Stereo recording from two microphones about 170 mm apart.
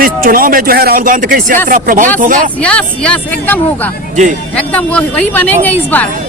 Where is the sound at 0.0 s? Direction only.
55° right (ahead or behind).